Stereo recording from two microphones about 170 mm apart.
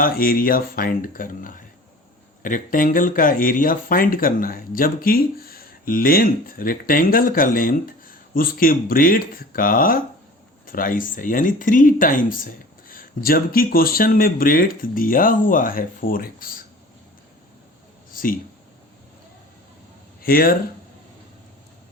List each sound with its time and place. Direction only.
0.0 s speech: 60° left (ahead or behind)
18.1 s a sound: 55° left (ahead or behind)
20.2 s speech: 60° left (ahead or behind)